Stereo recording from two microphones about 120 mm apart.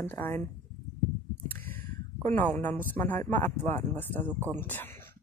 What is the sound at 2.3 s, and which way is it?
Speech, 15° left (ahead or behind).